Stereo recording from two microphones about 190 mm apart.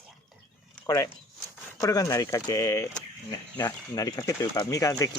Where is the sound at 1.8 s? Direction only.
20° left (ahead or behind).